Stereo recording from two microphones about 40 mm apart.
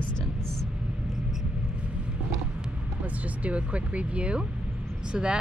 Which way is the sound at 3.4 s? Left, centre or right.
Right.